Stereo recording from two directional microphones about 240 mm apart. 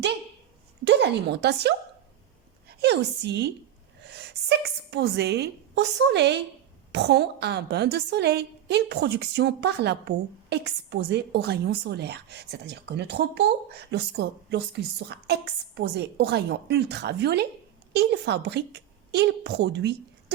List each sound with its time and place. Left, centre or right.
0.9 s a woman's voice: right